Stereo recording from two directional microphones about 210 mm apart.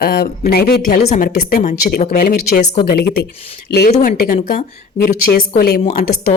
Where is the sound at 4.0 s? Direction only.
35° left (ahead or behind).